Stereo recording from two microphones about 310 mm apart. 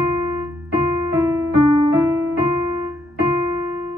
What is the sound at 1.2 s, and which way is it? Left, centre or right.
Keyboard, centre.